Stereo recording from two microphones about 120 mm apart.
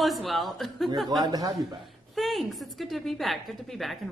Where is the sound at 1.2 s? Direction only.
30° right (ahead or behind).